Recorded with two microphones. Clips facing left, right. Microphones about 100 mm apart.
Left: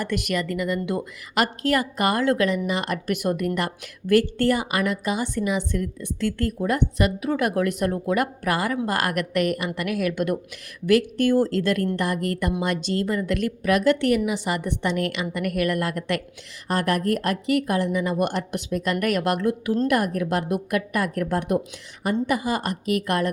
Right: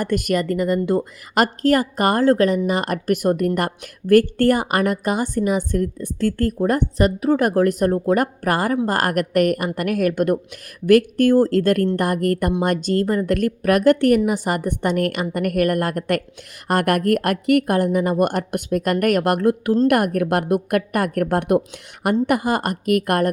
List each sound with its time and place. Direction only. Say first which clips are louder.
0.0 s a woman's voice: right 5 dB; 45° right (ahead or behind)
16.6 s a woman's voice: right 5 dB; 60° right (ahead or behind)